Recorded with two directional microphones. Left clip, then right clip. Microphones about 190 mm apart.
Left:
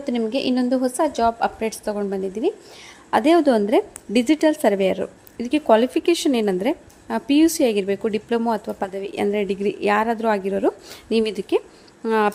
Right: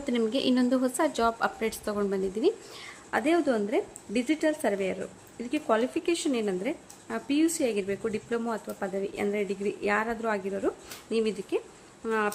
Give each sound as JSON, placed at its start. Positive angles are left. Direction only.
{"t": 0.0, "sound": "a woman's voice", "side_deg": 15}
{"t": 3.1, "sound": "a woman's voice", "side_deg": 30}